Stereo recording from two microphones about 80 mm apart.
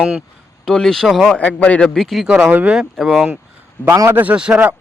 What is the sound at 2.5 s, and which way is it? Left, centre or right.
Speech, centre.